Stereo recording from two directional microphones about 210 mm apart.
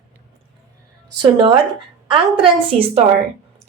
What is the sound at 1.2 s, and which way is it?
Speech, 25° right (ahead or behind).